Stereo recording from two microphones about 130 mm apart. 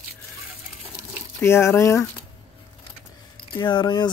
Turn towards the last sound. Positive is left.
turn(degrees=35)  # may be behind; listen again after turning